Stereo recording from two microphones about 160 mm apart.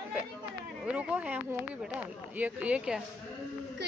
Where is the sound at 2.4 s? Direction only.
10° right (ahead or behind).